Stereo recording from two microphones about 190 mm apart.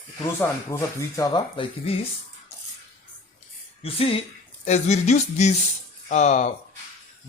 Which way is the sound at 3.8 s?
30° left (ahead or behind).